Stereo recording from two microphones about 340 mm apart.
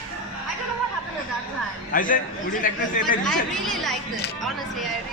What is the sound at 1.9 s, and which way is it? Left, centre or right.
A man's voice, left.